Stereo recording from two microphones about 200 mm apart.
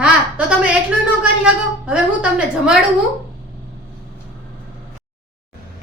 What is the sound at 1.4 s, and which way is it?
A woman's voice, 5° right (ahead or behind).